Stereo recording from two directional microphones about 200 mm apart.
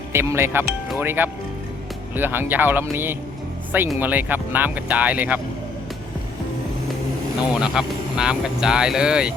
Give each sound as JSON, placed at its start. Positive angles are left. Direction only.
{"t": 0.1, "sound": "speech", "side_deg": -10}
{"t": 7.6, "sound": "speech", "side_deg": -5}